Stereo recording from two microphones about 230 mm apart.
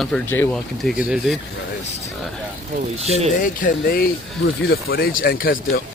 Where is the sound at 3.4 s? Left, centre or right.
Left.